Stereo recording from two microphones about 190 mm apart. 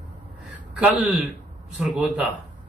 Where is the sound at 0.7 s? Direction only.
5° right (ahead or behind).